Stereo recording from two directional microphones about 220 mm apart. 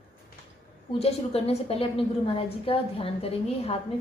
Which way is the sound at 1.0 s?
30° left (ahead or behind).